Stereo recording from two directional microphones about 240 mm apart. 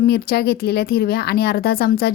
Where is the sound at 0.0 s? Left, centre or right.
Left.